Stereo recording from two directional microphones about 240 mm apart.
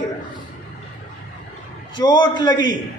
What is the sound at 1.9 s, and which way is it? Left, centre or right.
Speech, centre.